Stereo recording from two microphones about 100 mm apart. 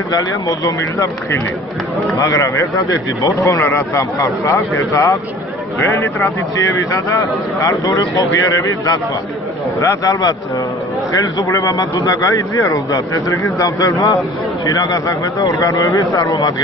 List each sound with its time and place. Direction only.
0.1 s speech: 35° left (ahead or behind)
6.5 s speech: 35° left (ahead or behind)
11.4 s speech: 30° left (ahead or behind)